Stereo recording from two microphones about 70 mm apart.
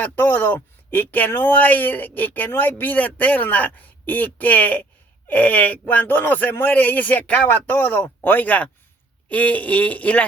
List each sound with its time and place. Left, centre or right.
0.0 s speech: left